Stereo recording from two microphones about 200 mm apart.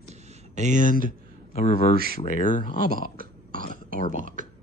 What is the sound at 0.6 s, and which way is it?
Speech, 40° right (ahead or behind).